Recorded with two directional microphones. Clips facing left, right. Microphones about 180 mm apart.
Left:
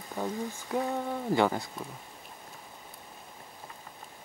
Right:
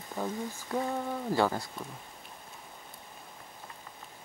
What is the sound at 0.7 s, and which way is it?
Speech, 15° left (ahead or behind).